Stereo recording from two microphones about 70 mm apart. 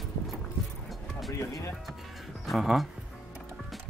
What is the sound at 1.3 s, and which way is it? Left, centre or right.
Speech, left.